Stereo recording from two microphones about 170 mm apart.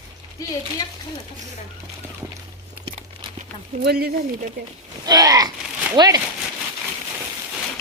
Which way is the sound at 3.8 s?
70° right (ahead or behind).